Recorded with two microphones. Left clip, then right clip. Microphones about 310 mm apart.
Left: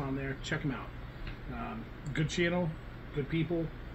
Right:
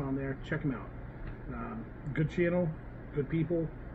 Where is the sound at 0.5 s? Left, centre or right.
Left.